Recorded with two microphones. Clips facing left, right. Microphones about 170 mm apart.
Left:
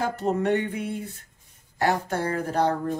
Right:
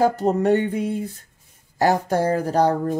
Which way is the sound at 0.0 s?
35° right (ahead or behind).